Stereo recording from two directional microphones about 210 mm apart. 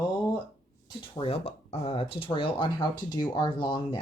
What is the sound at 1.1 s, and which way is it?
Speech, 25° left (ahead or behind).